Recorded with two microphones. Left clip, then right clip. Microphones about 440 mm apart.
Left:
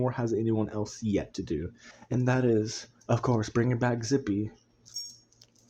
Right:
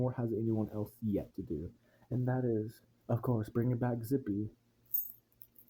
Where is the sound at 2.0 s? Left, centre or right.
Right.